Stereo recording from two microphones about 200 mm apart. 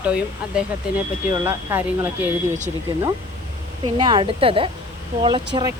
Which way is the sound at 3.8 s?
20° right (ahead or behind).